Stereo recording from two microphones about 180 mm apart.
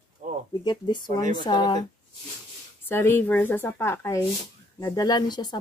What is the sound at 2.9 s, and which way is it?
Speech, 10° left (ahead or behind).